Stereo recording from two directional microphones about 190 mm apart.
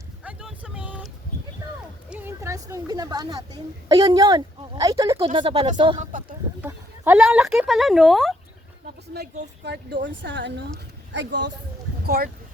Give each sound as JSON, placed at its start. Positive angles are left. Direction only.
{"t": 0.3, "sound": "vehicle", "side_deg": -5}
{"t": 2.0, "sound": "a woman's voice", "side_deg": -10}
{"t": 5.2, "sound": "a woman's voice", "side_deg": -30}
{"t": 6.0, "sound": "speech", "side_deg": -45}
{"t": 6.6, "sound": "speech", "side_deg": -10}
{"t": 9.6, "sound": "speech", "side_deg": -70}
{"t": 12.0, "sound": "speech", "side_deg": -55}